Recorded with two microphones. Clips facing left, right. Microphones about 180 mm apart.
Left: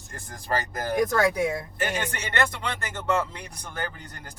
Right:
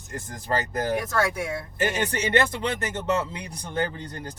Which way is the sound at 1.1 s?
15° left (ahead or behind).